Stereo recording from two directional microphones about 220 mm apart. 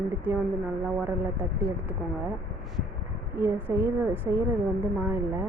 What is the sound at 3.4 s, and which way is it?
A woman's voice, 10° right (ahead or behind).